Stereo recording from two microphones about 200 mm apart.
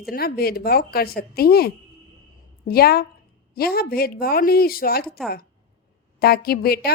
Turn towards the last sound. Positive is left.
turn(degrees=50)  # may be behind; listen again after turning